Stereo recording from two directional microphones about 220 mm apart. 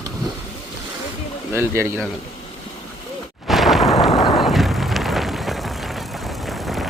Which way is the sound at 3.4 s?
Centre (ahead or behind).